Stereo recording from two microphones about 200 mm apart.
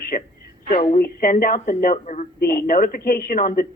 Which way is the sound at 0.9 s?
45° left (ahead or behind).